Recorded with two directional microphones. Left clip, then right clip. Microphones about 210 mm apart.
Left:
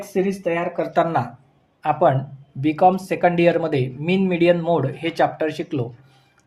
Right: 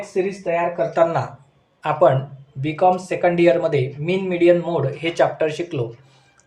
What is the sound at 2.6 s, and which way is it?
Speech, 30° left (ahead or behind).